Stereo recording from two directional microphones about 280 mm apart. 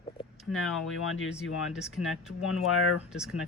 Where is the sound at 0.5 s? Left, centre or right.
Left.